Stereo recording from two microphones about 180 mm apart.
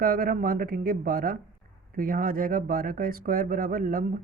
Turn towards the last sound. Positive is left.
turn(degrees=-50)  # may be behind; listen again after turning